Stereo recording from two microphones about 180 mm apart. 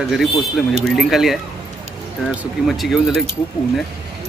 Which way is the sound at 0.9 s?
Centre (ahead or behind).